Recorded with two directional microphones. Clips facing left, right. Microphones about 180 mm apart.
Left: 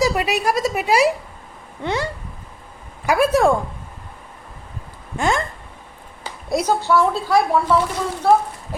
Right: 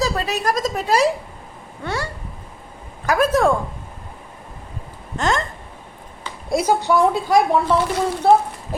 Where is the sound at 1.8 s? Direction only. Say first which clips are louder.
Left 3 dB; 20° left (ahead or behind).